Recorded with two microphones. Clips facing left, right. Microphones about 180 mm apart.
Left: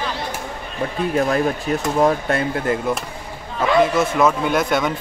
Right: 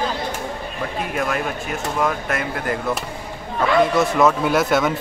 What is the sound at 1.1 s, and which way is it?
Speech, 35° left (ahead or behind).